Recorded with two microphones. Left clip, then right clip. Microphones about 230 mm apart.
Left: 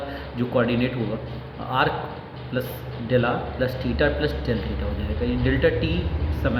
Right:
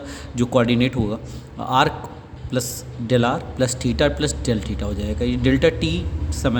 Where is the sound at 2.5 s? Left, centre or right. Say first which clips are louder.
Right 3 dB; right.